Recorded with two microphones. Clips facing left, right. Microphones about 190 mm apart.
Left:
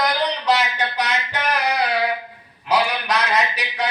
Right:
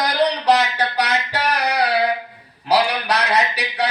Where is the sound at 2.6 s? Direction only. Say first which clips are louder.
Right 2 dB; 35° right (ahead or behind).